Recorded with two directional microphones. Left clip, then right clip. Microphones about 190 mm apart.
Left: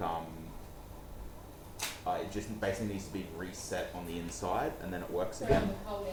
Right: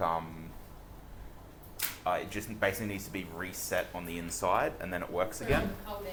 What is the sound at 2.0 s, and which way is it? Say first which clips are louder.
Speech: right 4 dB; 10° right (ahead or behind).